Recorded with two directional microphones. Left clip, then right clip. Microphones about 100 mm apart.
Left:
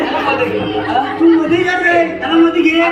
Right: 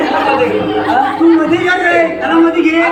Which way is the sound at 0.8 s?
25° right (ahead or behind).